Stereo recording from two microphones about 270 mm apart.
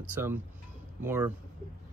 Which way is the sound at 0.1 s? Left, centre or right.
Centre.